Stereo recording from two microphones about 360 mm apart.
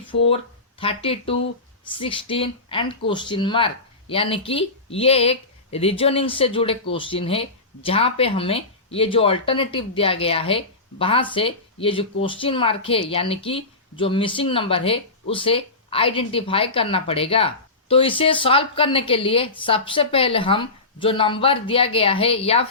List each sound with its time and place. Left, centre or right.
0.3 s speech: centre